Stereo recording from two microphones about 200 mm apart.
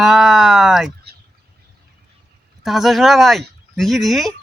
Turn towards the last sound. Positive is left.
turn(degrees=0)  # may be behind; listen again after turning